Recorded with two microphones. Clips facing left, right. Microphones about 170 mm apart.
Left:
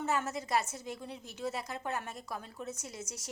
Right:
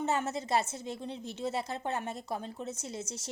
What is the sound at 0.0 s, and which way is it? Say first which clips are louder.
A woman's voice: right 2 dB; 25° right (ahead or behind).